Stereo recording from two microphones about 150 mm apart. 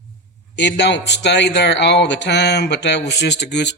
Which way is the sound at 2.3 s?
90° left.